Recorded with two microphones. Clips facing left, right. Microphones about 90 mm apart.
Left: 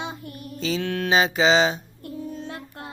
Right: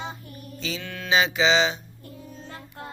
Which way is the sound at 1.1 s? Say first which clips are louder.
Left 2 dB; 40° left (ahead or behind).